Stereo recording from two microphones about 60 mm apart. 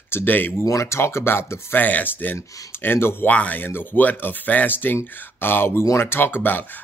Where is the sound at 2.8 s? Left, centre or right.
Left.